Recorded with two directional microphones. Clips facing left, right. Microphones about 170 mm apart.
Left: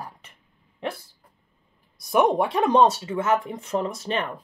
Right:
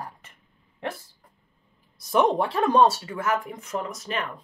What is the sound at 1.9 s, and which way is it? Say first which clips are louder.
Speech: left 1 dB; 15° left (ahead or behind).